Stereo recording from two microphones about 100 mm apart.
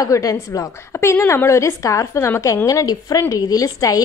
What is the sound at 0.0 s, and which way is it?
Speech, 35° left (ahead or behind).